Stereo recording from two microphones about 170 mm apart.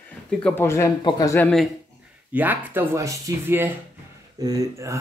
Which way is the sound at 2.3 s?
10° right (ahead or behind).